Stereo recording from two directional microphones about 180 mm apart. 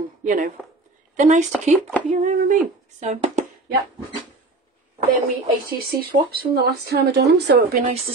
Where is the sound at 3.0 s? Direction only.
40° right (ahead or behind).